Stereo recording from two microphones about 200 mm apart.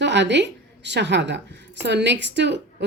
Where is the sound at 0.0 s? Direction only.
60° right (ahead or behind).